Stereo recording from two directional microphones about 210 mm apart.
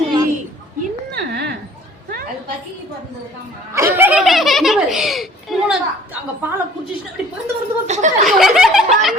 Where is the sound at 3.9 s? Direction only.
5° right (ahead or behind).